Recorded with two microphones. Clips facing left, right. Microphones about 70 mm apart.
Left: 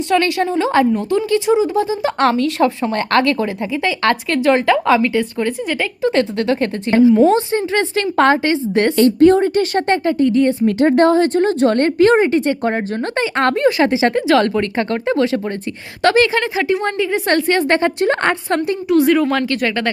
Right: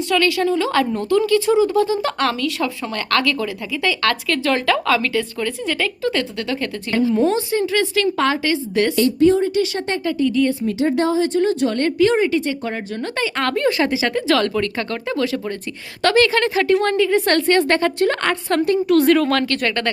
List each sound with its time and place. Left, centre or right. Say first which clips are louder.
0.1 s a woman's voice: left 2 dB; left
2.1 s a woman's voice: left 6 dB; left
10.7 s speech: left 6 dB; left
11.4 s a woman's voice: left 4 dB; left
16.4 s a woman's voice: right 1 dB; centre
18.9 s speech: left 3 dB; centre